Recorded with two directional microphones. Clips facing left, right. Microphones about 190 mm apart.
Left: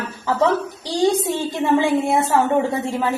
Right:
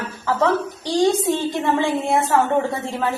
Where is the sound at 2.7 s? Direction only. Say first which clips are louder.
Left 2 dB; 10° left (ahead or behind).